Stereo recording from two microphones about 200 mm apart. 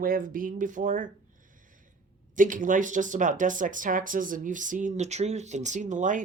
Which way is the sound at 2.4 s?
40° right (ahead or behind).